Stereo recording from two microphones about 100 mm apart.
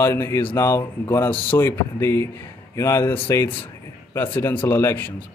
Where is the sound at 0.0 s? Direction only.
25° left (ahead or behind).